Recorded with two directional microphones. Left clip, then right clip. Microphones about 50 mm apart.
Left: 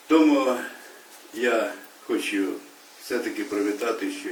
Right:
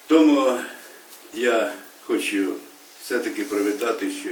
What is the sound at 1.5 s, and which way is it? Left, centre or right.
Speech, centre.